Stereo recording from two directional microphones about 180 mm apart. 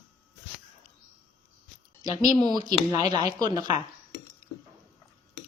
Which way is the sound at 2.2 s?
20° right (ahead or behind).